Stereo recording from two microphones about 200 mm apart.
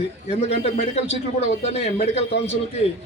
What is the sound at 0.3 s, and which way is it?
Speech, 35° left (ahead or behind).